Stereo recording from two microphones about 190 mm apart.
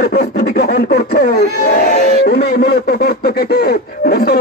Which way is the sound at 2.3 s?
55° left (ahead or behind).